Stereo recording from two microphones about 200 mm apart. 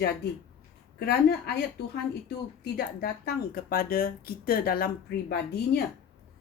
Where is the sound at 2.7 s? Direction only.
50° left (ahead or behind).